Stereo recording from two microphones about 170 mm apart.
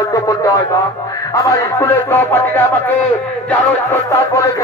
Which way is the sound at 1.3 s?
20° left (ahead or behind).